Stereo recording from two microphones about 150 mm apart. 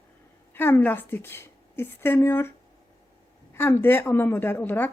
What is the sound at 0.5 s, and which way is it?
A woman's voice, 15° left (ahead or behind).